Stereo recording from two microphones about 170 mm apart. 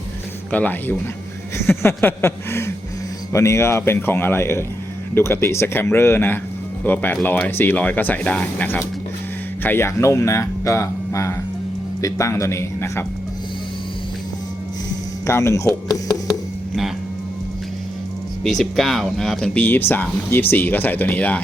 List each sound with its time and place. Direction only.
0.5 s speech: 10° left (ahead or behind)
15.3 s speech: 15° left (ahead or behind)
18.4 s speech: centre (ahead or behind)